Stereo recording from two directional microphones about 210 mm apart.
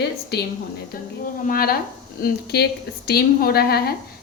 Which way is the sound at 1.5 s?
45° left (ahead or behind).